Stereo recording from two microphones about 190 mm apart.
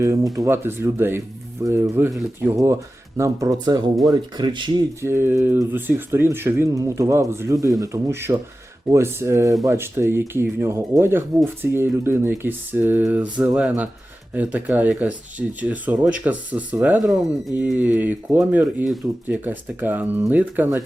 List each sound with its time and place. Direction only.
0.3 s speech: 15° right (ahead or behind)
3.2 s speech: 15° right (ahead or behind)
5.0 s speech: 10° right (ahead or behind)